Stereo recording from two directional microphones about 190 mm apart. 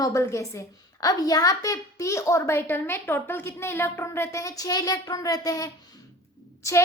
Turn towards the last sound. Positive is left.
turn(degrees=15)  # may be behind; listen again after turning